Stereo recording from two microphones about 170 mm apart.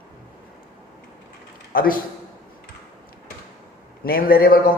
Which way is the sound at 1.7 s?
55° left (ahead or behind).